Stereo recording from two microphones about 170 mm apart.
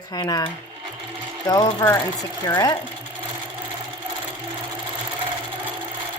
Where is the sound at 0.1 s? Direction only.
25° left (ahead or behind).